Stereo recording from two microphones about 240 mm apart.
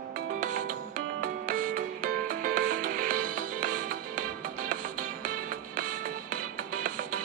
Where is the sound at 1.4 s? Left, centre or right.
Right.